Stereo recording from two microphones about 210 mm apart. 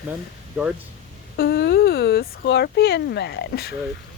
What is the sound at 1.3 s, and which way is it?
Speech, 50° left (ahead or behind).